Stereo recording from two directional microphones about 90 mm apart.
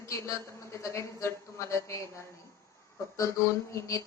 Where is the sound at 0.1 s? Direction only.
35° left (ahead or behind).